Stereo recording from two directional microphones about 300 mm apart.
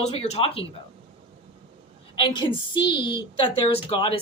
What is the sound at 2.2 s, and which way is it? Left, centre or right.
A woman's voice, centre.